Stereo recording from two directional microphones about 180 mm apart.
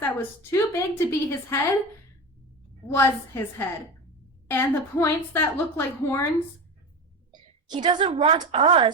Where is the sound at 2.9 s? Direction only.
15° left (ahead or behind).